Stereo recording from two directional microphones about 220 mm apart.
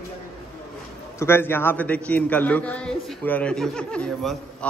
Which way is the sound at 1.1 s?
10° left (ahead or behind).